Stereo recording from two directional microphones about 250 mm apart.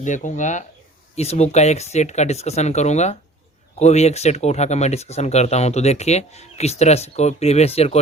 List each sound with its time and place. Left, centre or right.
0.0 s speech: left